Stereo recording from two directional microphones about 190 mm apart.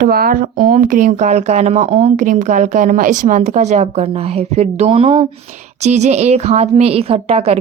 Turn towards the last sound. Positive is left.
turn(degrees=-35)  # may be behind; listen again after turning